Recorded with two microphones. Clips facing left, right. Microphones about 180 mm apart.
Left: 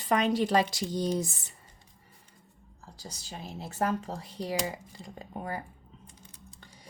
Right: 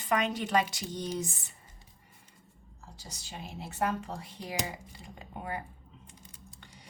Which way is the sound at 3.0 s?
35° left (ahead or behind).